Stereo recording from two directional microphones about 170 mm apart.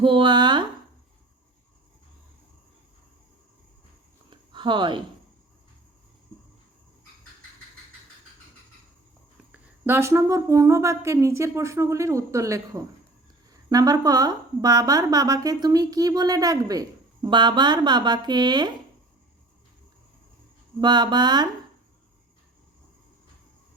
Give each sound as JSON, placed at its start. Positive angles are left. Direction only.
{"t": 0.0, "sound": "a woman's voice", "side_deg": -30}
{"t": 4.3, "sound": "a sound", "side_deg": -30}
{"t": 9.5, "sound": "a woman's voice", "side_deg": -10}
{"t": 20.8, "sound": "a woman's voice", "side_deg": -25}